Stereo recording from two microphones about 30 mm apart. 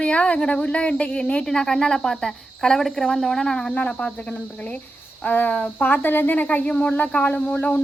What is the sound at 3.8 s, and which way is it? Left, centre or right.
Speech, left.